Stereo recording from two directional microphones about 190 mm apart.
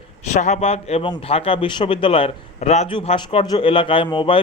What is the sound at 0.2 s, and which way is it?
A man's voice, 40° left (ahead or behind).